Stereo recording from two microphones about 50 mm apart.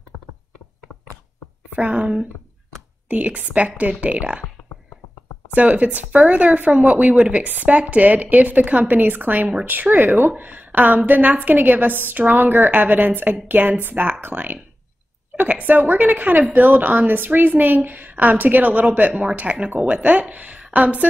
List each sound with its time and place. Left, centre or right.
1.8 s speech: right
3.1 s speech: right
5.5 s a woman's voice: right